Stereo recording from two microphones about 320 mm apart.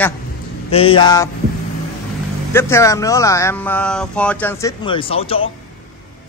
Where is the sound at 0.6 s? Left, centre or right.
Centre.